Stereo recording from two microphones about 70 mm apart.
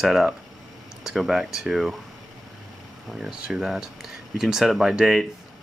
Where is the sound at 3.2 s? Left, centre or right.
Centre.